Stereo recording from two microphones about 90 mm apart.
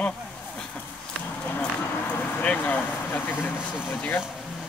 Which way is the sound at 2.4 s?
20° left (ahead or behind).